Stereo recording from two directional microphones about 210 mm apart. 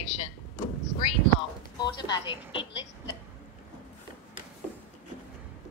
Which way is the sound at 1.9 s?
20° left (ahead or behind).